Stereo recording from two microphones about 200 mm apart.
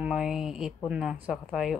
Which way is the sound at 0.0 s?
5° right (ahead or behind).